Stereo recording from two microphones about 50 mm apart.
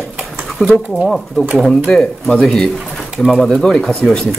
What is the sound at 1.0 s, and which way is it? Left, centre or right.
Speech, centre.